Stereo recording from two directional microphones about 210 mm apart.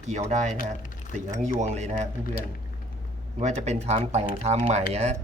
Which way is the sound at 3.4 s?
35° right (ahead or behind).